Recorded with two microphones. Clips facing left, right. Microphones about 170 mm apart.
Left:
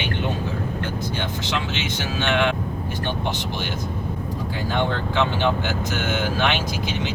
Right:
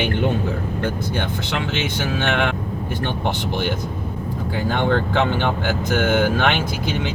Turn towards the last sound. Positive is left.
turn(degrees=-55)  # may be behind; listen again after turning